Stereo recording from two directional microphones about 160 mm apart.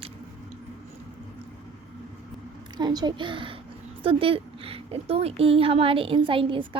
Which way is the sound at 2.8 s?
25° right (ahead or behind).